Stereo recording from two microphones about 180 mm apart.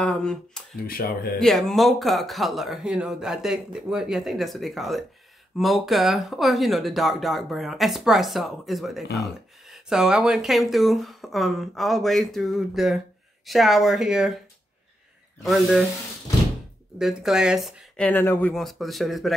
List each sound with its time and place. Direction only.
0.0 s speech: 5° left (ahead or behind)
0.7 s speech: 55° left (ahead or behind)
1.4 s speech: centre (ahead or behind)
15.4 s speech: centre (ahead or behind)
17.0 s speech: 5° right (ahead or behind)